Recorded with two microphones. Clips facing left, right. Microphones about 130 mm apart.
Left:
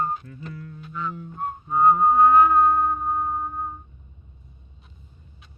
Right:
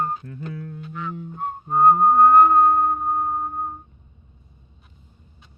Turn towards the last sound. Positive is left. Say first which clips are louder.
# right 2 dB
turn(degrees=-45)  # may be behind; listen again after turning